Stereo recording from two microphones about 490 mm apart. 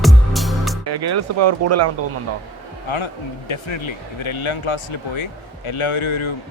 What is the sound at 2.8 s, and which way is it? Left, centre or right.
Speech, left.